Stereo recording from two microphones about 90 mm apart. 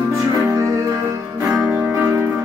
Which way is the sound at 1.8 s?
25° right (ahead or behind).